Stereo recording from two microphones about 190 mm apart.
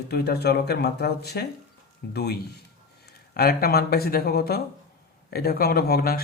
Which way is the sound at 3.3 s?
55° left (ahead or behind).